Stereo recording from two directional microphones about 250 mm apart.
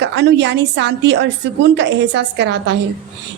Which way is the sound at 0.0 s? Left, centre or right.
Right.